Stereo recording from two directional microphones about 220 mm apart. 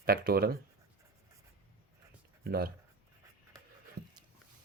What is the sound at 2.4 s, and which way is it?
Speech, 45° right (ahead or behind).